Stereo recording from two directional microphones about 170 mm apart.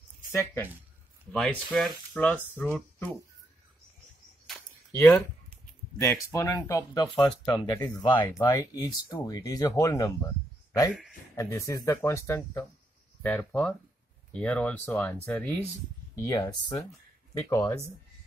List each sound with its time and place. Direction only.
0.3 s speech: 15° left (ahead or behind)
4.9 s speech: 10° left (ahead or behind)
10.9 s speech: 5° right (ahead or behind)
11.3 s speech: 20° left (ahead or behind)